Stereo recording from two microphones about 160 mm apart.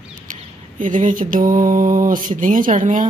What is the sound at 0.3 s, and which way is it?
Mantra, 55° right (ahead or behind).